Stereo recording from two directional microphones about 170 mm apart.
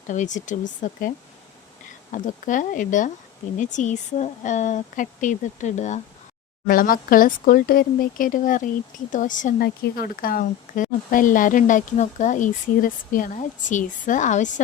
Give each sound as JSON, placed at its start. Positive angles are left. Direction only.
{"t": 0.1, "sound": "speech", "side_deg": 45}
{"t": 2.1, "sound": "speech", "side_deg": 50}
{"t": 6.7, "sound": "speech", "side_deg": 55}